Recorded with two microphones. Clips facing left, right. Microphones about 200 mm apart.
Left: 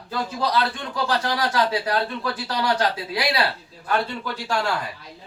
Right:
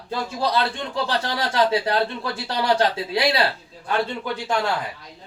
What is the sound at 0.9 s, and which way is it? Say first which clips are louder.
Speech: left 1 dB; 25° right (ahead or behind).